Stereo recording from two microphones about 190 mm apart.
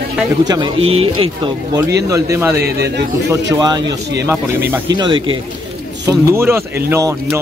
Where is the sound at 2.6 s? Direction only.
60° right (ahead or behind).